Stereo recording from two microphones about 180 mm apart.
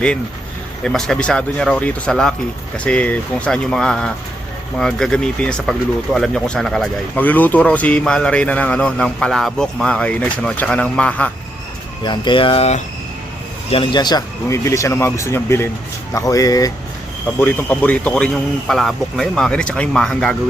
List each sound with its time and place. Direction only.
0.9 s speech: 5° left (ahead or behind)
12.0 s speech: 25° left (ahead or behind); by 20.3 s 5° left (ahead or behind)